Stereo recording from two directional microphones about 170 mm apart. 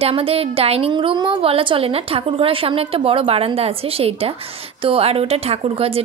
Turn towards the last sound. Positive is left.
turn(degrees=-35)  # may be behind; listen again after turning